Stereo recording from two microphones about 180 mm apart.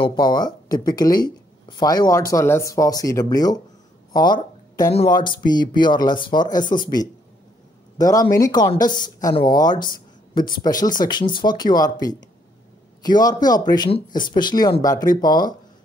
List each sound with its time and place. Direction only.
0.0 s speech: 25° left (ahead or behind)
4.1 s a sound: 25° left (ahead or behind)
4.9 s speech: 25° left (ahead or behind)